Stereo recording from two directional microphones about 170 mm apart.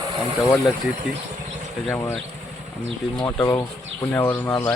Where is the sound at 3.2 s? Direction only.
20° left (ahead or behind).